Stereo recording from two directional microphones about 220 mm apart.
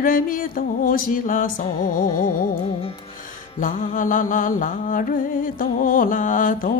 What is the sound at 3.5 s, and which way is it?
Mantra, 35° left (ahead or behind).